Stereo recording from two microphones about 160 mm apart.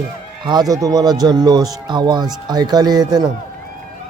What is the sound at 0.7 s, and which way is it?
Speech, 20° right (ahead or behind).